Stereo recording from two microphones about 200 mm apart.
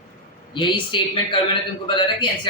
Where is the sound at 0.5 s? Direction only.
25° left (ahead or behind).